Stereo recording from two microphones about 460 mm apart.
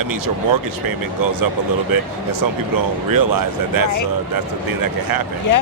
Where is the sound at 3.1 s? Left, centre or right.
Right.